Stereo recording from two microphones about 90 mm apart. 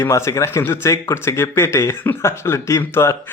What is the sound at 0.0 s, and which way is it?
A man's voice, 30° left (ahead or behind).